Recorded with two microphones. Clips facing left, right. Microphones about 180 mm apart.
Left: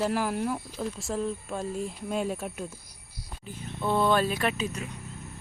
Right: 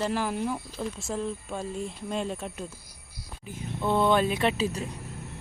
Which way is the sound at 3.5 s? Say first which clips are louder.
Right 1 dB; 20° right (ahead or behind).